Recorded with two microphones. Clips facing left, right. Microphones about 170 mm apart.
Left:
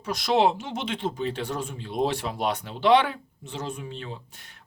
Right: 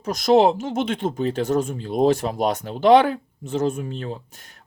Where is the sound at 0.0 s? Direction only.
45° right (ahead or behind).